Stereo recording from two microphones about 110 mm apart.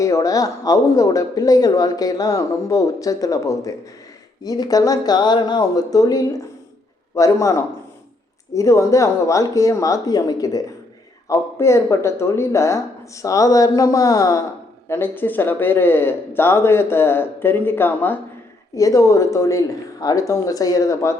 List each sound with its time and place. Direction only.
0.0 s speech: 30° left (ahead or behind)
14.8 s speech: 20° left (ahead or behind)
18.7 s speech: 30° left (ahead or behind)